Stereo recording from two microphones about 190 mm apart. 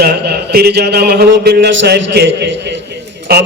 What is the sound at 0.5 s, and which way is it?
A man's voice, 55° right (ahead or behind).